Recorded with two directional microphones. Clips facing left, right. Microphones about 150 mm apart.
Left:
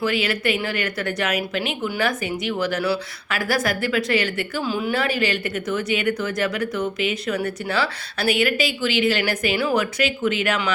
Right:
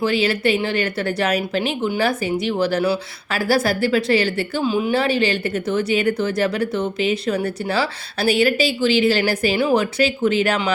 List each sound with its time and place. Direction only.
0.0 s speech: 30° right (ahead or behind)
4.6 s speech: 20° right (ahead or behind)